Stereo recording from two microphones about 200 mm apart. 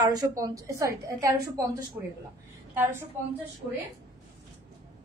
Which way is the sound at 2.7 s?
10° right (ahead or behind).